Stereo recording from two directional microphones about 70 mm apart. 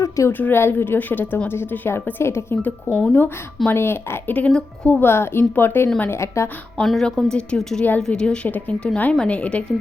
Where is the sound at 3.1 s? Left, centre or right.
Left.